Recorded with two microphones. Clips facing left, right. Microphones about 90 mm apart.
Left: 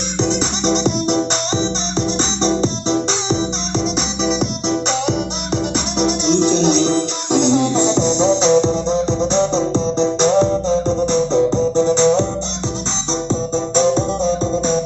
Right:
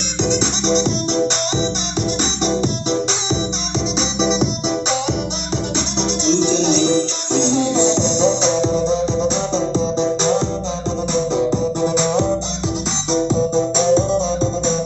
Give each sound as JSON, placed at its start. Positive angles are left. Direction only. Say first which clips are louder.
{"t": 0.2, "sound": "music", "louder": "even", "side_deg": 40}
{"t": 0.7, "sound": "music", "louder": "left 2 dB", "side_deg": 0}
{"t": 2.0, "sound": "music", "louder": "left 2 dB", "side_deg": 35}
{"t": 4.2, "sound": "music", "louder": "right 2 dB", "side_deg": 0}
{"t": 11.8, "sound": "music", "louder": "left 4 dB", "side_deg": -10}